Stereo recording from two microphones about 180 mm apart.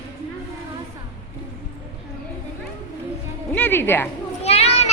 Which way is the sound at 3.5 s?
10° left (ahead or behind).